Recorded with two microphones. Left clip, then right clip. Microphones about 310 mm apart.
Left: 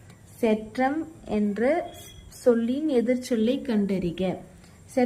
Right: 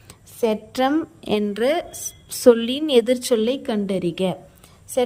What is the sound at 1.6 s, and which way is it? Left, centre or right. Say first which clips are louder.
Speech: right 2 dB; right.